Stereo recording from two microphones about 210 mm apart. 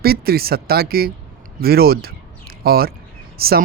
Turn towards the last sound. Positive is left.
turn(degrees=-45)  # may be behind; listen again after turning